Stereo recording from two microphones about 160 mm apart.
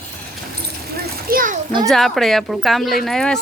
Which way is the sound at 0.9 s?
70° right (ahead or behind).